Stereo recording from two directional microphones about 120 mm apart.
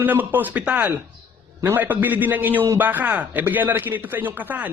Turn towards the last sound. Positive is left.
turn(degrees=-15)  # may be behind; listen again after turning